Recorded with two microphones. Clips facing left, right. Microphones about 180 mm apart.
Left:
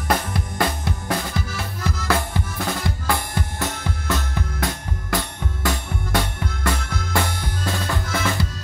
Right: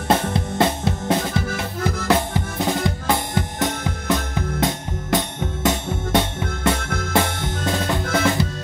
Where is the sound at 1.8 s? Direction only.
55° right (ahead or behind).